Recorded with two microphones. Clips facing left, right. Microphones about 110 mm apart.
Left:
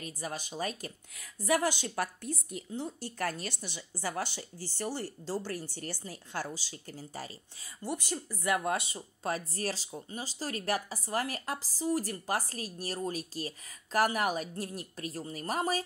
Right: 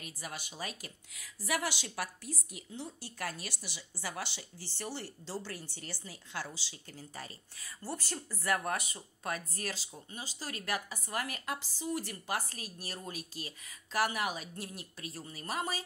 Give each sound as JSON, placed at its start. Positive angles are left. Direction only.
{"t": 0.0, "sound": "speech", "side_deg": 35}
{"t": 7.8, "sound": "speech", "side_deg": 15}
{"t": 9.6, "sound": "speech", "side_deg": 40}